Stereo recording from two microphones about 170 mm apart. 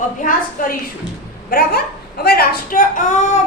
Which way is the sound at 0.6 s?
55° left (ahead or behind).